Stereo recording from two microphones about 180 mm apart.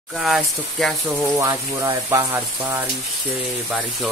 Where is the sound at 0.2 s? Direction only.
Centre (ahead or behind).